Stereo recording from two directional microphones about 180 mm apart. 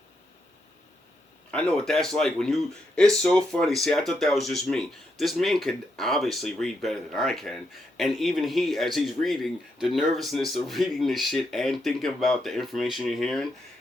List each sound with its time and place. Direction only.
1.5 s speech: 5° left (ahead or behind)